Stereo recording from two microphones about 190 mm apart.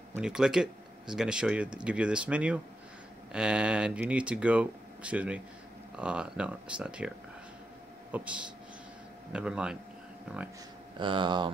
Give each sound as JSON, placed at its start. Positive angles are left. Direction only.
{"t": 0.1, "sound": "speech", "side_deg": -5}
{"t": 8.1, "sound": "speech", "side_deg": -5}
{"t": 11.0, "sound": "speech", "side_deg": -25}